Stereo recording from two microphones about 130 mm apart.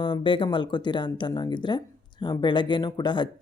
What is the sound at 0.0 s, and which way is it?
Speech, 40° left (ahead or behind).